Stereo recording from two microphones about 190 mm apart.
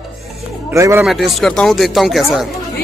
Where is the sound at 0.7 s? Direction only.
15° right (ahead or behind).